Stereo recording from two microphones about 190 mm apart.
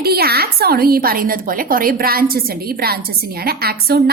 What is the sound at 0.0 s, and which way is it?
A woman's voice, 55° right (ahead or behind).